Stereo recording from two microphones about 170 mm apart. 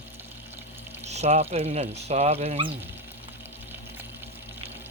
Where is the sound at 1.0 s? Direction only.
40° right (ahead or behind).